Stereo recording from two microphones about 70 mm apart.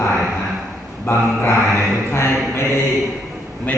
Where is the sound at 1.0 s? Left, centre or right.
Left.